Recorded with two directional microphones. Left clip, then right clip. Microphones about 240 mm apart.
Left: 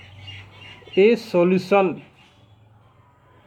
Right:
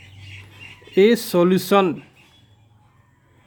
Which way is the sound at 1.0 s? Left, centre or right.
Right.